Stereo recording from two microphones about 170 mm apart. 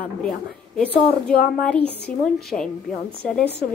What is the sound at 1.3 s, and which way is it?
Speech, 60° left (ahead or behind).